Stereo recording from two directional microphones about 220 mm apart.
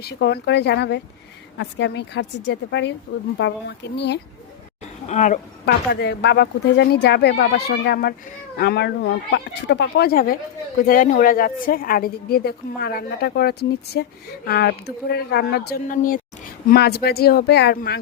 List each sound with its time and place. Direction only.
0.0 s a woman's voice: 50° left (ahead or behind)
5.0 s speech: 35° left (ahead or behind)
5.6 s a woman's voice: 50° left (ahead or behind)